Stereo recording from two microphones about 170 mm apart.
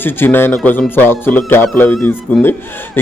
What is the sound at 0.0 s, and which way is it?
A man's voice, 10° left (ahead or behind).